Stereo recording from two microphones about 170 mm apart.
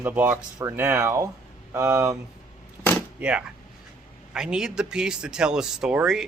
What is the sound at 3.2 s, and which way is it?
Speech, 5° right (ahead or behind).